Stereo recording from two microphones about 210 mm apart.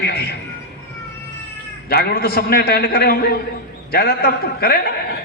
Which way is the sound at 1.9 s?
50° left (ahead or behind).